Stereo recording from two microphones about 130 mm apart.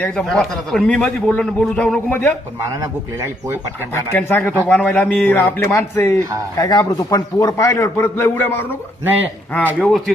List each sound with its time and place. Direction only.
0.0 s a man's voice: 5° left (ahead or behind)
3.9 s a man's voice: 15° left (ahead or behind)